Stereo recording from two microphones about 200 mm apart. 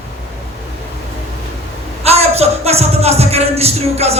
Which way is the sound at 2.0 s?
30° right (ahead or behind).